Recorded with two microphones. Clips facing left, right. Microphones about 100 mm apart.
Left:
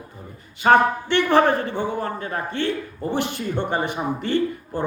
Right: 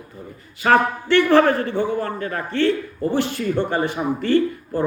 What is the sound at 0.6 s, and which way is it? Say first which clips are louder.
A man's voice: left 1 dB; 25° left (ahead or behind).